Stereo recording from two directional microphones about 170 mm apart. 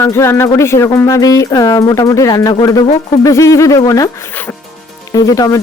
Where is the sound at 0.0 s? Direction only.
15° left (ahead or behind).